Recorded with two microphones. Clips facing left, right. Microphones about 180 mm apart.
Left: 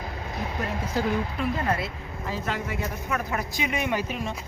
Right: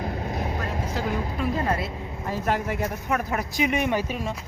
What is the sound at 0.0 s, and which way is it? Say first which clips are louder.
Vehicle: right 4 dB; 50° right (ahead or behind).